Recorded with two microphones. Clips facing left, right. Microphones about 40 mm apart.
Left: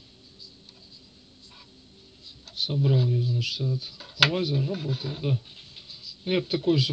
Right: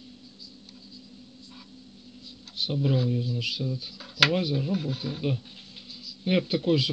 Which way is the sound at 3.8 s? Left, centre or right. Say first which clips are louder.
Even; centre.